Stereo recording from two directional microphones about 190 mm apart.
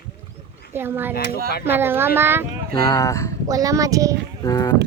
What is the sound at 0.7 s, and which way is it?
Speech, 10° right (ahead or behind).